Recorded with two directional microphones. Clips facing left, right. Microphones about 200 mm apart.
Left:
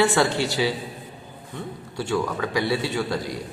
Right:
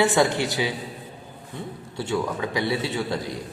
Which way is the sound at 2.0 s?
20° right (ahead or behind).